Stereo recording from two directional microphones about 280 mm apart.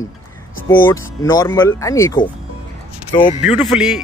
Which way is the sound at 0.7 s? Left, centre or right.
Centre.